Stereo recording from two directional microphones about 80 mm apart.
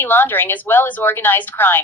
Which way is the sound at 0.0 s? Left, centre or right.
Left.